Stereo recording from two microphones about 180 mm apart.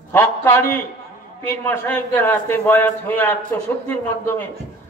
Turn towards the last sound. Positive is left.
turn(degrees=10)  # may be behind; listen again after turning